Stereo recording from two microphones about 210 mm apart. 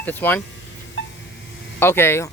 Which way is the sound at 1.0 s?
60° left (ahead or behind).